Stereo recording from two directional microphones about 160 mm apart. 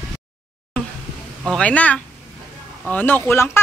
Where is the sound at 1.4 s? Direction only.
5° left (ahead or behind).